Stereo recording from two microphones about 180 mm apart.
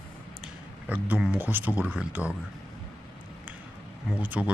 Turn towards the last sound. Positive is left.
turn(degrees=-10)  # may be behind; listen again after turning